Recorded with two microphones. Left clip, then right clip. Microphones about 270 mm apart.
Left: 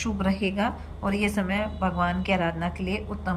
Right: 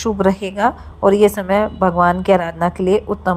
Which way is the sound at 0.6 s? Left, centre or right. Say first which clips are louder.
Right 14 dB; right.